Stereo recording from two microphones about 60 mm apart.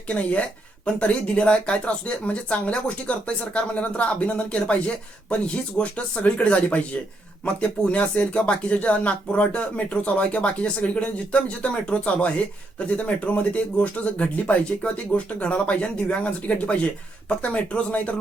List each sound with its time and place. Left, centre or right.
0.1 s speech: left